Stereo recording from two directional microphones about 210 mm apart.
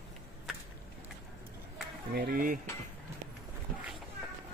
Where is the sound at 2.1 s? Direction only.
45° right (ahead or behind).